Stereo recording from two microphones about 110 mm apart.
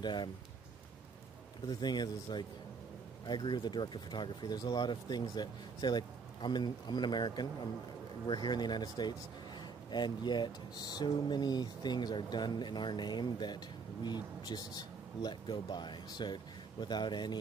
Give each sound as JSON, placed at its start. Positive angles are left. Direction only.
{"t": 0.0, "sound": "speech", "side_deg": 45}
{"t": 1.7, "sound": "speech", "side_deg": 40}